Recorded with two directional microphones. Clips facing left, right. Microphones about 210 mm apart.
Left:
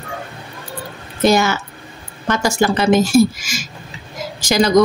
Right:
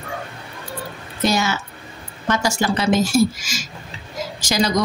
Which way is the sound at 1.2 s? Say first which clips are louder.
Left 6 dB; 55° left (ahead or behind).